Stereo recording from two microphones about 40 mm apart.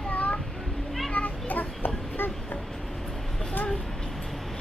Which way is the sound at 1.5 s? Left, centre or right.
Left.